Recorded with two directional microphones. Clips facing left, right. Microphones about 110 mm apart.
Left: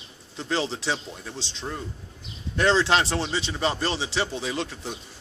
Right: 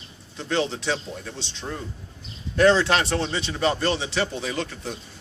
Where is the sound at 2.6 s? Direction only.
25° left (ahead or behind).